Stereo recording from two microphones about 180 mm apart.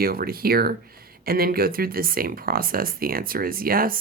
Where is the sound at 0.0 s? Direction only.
55° right (ahead or behind).